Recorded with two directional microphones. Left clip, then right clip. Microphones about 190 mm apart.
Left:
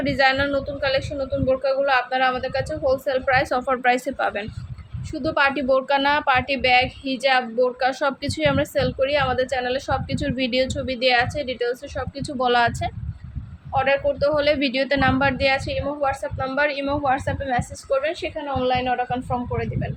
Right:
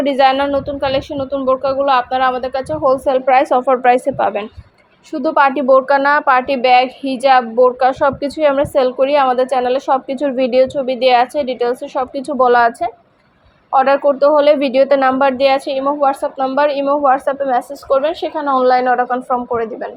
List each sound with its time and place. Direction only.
0.0 s a woman's voice: 15° right (ahead or behind)
13.7 s speech: 10° right (ahead or behind)